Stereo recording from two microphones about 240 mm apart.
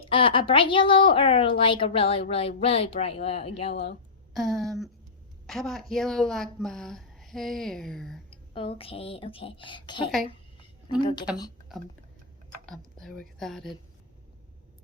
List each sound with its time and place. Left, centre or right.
0.0 s a woman's voice: left
4.4 s speech: centre
8.3 s speech: left
12.6 s speech: centre